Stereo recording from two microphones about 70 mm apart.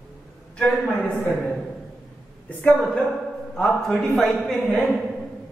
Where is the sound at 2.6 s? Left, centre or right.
Centre.